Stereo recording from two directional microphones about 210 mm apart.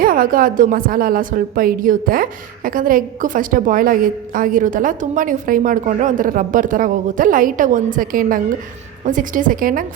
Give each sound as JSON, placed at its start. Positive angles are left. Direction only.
{"t": 0.0, "sound": "a woman's voice", "side_deg": -40}